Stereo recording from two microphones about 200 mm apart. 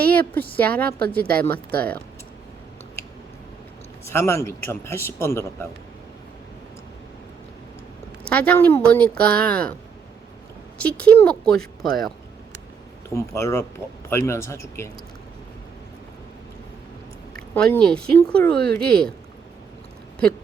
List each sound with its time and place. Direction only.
0.0 s a woman's voice: 10° left (ahead or behind)
4.0 s a man's voice: 15° left (ahead or behind)
8.3 s a man's voice: 5° left (ahead or behind)
10.8 s a man's voice: 5° left (ahead or behind)
13.1 s a man's voice: 15° left (ahead or behind)
17.5 s speech: 5° left (ahead or behind)